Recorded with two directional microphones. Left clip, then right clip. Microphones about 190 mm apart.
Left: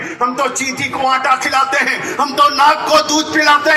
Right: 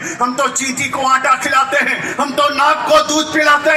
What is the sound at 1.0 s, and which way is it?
Music, 10° right (ahead or behind).